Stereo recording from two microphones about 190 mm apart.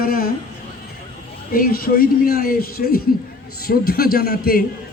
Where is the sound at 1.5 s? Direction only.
50° left (ahead or behind).